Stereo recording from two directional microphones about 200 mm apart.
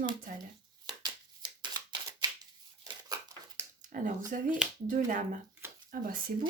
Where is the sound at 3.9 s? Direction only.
40° right (ahead or behind).